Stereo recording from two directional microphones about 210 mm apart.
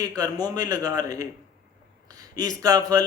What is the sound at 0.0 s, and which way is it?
Speech, 15° right (ahead or behind).